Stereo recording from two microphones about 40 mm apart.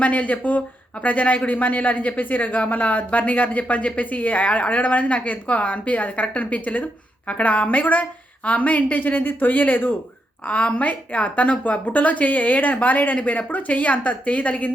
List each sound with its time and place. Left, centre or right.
0.0 s speech: left
10.4 s speech: left